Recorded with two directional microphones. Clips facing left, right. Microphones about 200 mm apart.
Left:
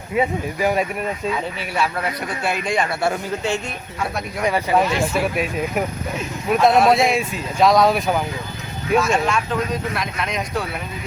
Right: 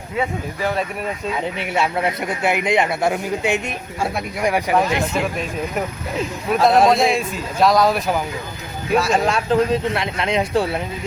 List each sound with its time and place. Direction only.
0.2 s speech: 15° left (ahead or behind)
1.5 s a man's voice: 20° right (ahead or behind)
5.1 s speech: 10° left (ahead or behind)
6.7 s speech: centre (ahead or behind)
9.0 s a man's voice: 35° right (ahead or behind)